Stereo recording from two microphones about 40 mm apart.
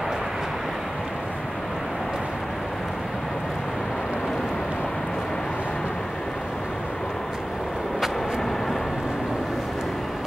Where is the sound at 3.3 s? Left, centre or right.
Centre.